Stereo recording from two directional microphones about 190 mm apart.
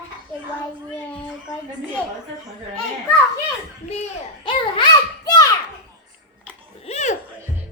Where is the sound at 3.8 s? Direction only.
35° left (ahead or behind).